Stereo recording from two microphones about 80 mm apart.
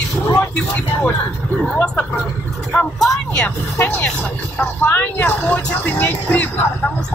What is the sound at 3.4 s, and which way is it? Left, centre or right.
Speech, left.